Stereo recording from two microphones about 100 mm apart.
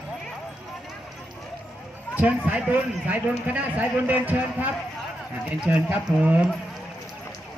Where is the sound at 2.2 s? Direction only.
15° right (ahead or behind).